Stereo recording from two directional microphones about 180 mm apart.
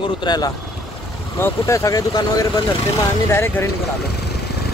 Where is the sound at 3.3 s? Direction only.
15° left (ahead or behind).